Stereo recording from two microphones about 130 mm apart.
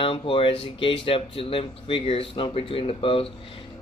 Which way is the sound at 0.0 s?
45° left (ahead or behind).